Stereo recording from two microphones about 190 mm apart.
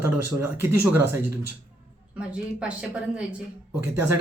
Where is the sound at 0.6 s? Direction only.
15° right (ahead or behind).